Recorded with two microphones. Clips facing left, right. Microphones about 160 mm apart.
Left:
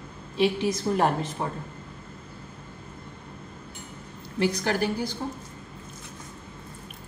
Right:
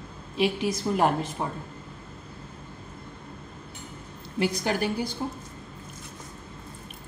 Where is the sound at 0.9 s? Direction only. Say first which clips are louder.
Left 1 dB; 5° left (ahead or behind).